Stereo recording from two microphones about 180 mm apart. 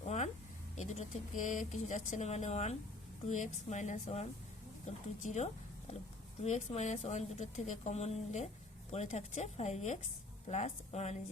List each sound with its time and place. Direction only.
0.8 s a woman's voice: 40° left (ahead or behind)